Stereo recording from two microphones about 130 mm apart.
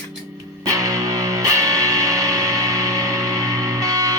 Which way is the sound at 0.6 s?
25° right (ahead or behind).